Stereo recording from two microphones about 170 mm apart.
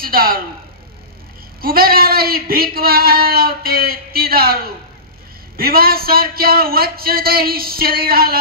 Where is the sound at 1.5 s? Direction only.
60° right (ahead or behind).